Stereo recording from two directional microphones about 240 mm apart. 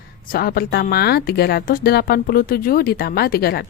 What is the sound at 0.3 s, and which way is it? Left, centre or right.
A woman's voice, left.